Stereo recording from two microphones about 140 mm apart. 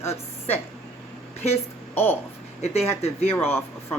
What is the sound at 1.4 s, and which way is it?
A woman's voice, 50° left (ahead or behind).